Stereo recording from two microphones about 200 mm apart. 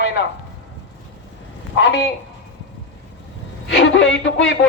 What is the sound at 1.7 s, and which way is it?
Speech, 60° left (ahead or behind).